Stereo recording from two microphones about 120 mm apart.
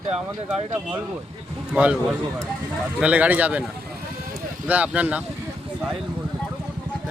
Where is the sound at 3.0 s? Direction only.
10° right (ahead or behind).